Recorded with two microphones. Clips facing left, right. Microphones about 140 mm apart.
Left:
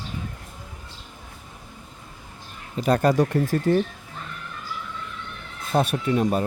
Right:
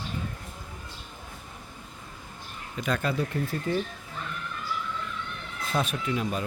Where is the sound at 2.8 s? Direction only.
35° left (ahead or behind).